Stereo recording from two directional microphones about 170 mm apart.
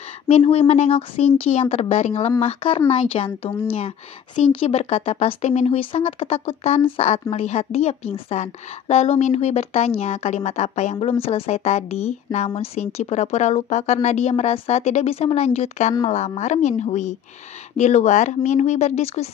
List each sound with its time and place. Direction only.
0.3 s a woman's voice: 35° left (ahead or behind)
4.4 s a woman's voice: 35° left (ahead or behind)